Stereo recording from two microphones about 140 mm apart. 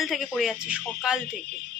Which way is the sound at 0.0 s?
Centre (ahead or behind).